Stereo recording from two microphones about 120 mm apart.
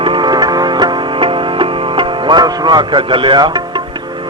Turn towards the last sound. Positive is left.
turn(degrees=-40)  # may be behind; listen again after turning